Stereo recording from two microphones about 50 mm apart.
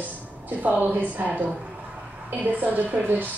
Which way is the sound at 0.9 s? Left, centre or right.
Right.